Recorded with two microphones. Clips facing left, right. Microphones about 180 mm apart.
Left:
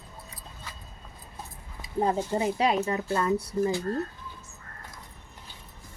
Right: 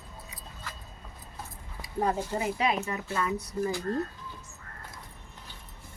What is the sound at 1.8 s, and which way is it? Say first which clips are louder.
Speech: left 3 dB; 25° left (ahead or behind).